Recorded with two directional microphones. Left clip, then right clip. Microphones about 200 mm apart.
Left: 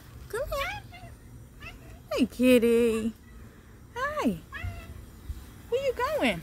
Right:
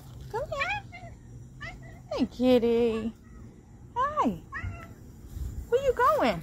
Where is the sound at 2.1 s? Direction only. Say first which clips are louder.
Left 1 dB; 90° left.